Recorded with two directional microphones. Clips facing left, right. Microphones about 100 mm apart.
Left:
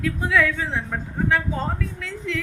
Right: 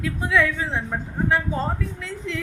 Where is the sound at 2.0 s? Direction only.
25° right (ahead or behind).